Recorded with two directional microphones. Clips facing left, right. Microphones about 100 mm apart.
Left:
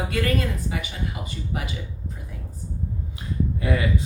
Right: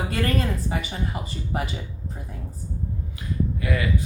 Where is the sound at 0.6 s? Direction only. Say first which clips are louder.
Right 2 dB; 35° right (ahead or behind).